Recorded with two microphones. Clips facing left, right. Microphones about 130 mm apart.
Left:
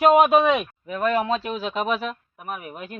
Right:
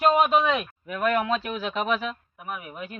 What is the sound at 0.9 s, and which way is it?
Speech, 30° left (ahead or behind).